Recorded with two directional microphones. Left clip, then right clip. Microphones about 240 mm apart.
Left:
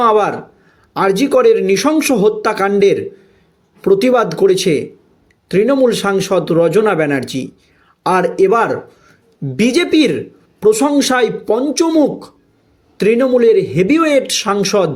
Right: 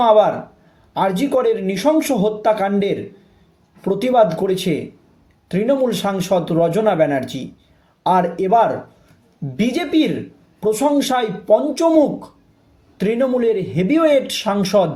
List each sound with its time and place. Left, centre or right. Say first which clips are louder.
0.0 s speech: even; left